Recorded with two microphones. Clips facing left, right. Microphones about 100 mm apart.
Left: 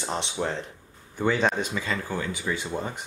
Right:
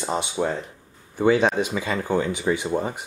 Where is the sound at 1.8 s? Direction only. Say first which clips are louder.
Right 6 dB; 20° right (ahead or behind).